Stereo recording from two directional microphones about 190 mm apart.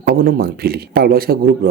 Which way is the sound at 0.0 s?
50° right (ahead or behind).